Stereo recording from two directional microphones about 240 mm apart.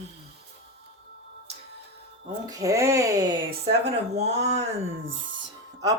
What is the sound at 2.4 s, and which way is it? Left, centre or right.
Speech, centre.